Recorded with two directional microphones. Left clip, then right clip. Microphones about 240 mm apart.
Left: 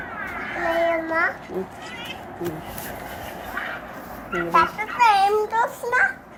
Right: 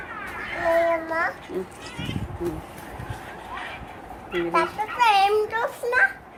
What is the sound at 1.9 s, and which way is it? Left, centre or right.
Speech, right.